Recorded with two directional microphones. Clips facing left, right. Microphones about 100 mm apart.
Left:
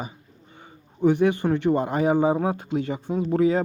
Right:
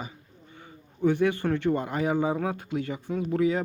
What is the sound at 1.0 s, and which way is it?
Speech, 20° left (ahead or behind).